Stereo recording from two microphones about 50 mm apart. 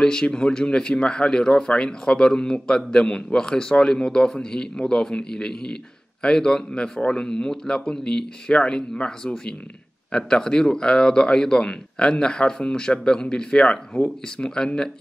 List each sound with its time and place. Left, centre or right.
0.0 s a man's voice: centre